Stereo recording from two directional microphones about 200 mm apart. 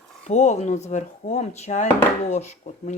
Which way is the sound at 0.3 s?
35° left (ahead or behind).